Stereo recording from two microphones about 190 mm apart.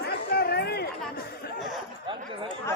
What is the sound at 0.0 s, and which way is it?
Chatter, 60° left (ahead or behind).